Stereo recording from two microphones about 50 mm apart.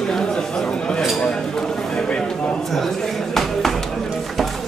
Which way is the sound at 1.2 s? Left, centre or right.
Centre.